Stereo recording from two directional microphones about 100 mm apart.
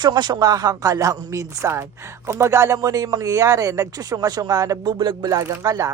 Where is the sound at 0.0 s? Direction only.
45° right (ahead or behind).